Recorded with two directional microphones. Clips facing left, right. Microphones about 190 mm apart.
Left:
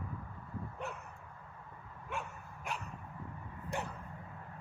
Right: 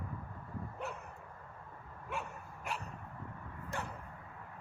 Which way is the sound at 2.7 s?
Centre (ahead or behind).